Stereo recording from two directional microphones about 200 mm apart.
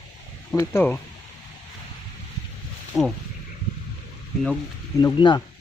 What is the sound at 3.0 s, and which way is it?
Speech, centre (ahead or behind).